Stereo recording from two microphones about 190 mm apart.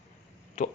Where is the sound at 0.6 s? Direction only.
40° left (ahead or behind).